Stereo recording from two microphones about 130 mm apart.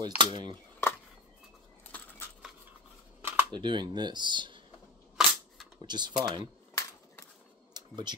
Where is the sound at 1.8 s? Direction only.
10° left (ahead or behind).